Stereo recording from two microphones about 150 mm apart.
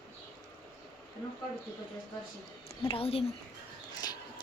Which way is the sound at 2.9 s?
40° left (ahead or behind).